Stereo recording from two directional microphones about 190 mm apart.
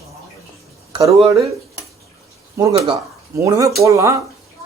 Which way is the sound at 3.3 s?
15° right (ahead or behind).